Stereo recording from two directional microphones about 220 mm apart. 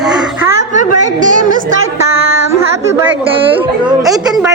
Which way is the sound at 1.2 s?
35° right (ahead or behind).